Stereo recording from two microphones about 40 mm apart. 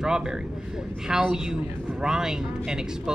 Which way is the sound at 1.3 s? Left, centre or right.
Centre.